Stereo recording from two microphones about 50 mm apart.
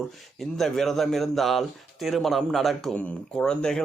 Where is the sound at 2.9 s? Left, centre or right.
Left.